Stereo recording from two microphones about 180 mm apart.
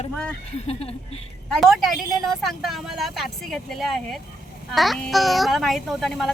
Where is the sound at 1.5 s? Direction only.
Centre (ahead or behind).